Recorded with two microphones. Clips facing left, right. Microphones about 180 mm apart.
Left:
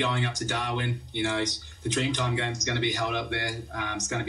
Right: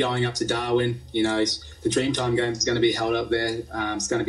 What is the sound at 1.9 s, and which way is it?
Speech, 40° right (ahead or behind).